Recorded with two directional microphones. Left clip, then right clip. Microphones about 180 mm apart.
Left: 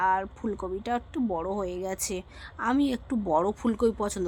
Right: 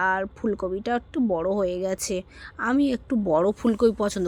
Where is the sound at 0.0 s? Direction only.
15° right (ahead or behind).